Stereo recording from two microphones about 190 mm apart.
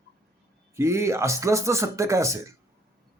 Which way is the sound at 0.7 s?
15° right (ahead or behind).